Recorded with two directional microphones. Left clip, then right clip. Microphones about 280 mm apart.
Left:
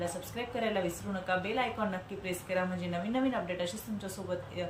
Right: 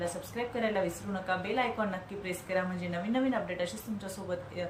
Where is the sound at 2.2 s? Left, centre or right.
Centre.